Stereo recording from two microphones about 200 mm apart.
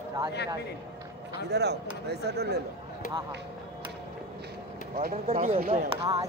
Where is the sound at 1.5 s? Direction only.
55° right (ahead or behind).